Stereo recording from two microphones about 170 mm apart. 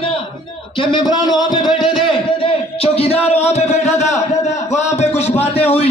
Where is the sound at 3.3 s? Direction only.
40° left (ahead or behind).